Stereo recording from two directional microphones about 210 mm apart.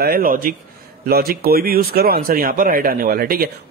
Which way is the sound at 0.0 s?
45° right (ahead or behind).